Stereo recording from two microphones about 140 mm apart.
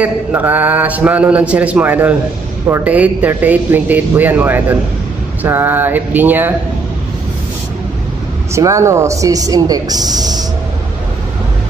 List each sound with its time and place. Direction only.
0.0 s a man's voice: 15° right (ahead or behind)
8.5 s speech: 20° right (ahead or behind)